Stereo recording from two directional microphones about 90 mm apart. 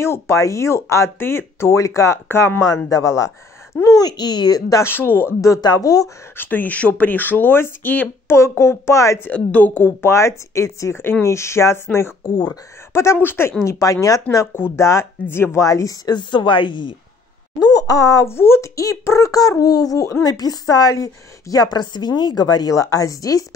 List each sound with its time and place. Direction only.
0.0 s speech: 30° left (ahead or behind)
2.9 s a woman's voice: 40° left (ahead or behind)
4.8 s speech: 25° left (ahead or behind)
5.6 s speech: 45° left (ahead or behind)
6.3 s speech: 20° left (ahead or behind)
9.3 s speech: 15° left (ahead or behind)
13.7 s speech: 35° left (ahead or behind)
16.2 s speech: 60° left (ahead or behind)
17.6 s speech: 40° left (ahead or behind)
20.3 s a woman's voice: 45° left (ahead or behind)